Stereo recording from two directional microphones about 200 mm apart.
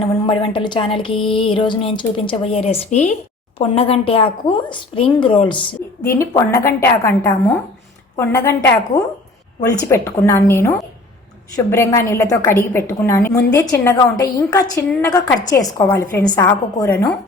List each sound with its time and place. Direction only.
0.0 s a woman's voice: 25° left (ahead or behind)